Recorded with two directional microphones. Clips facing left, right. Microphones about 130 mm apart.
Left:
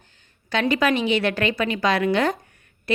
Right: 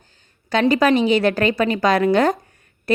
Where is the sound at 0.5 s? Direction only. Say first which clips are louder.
Right 5 dB; 40° right (ahead or behind).